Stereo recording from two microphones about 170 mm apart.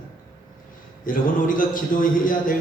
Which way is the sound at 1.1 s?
55° left (ahead or behind).